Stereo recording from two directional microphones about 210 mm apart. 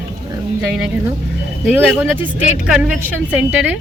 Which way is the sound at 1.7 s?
10° right (ahead or behind).